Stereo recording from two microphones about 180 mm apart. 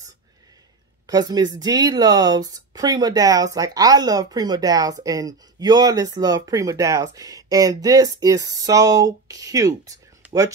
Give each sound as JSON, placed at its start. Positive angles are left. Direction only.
{"t": 1.0, "sound": "speech", "side_deg": -20}